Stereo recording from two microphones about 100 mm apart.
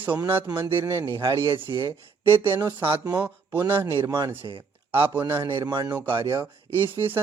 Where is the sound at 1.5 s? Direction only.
55° right (ahead or behind).